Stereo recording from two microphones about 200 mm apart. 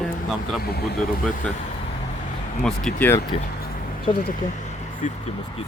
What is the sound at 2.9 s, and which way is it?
Speech, 10° left (ahead or behind).